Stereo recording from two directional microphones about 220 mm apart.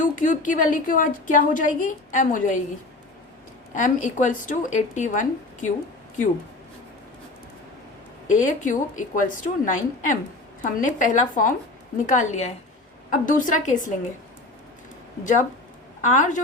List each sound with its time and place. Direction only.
0.0 s a woman's voice: 35° left (ahead or behind)
3.8 s a woman's voice: 35° left (ahead or behind)
8.3 s a woman's voice: 35° left (ahead or behind)
16.0 s a woman's voice: 35° left (ahead or behind)